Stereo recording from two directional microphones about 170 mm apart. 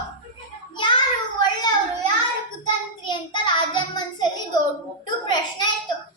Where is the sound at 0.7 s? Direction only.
30° left (ahead or behind).